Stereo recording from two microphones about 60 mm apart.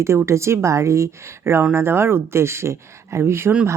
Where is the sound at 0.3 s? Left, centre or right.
Right.